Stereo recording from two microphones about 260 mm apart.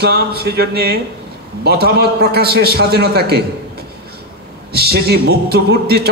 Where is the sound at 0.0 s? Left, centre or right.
Right.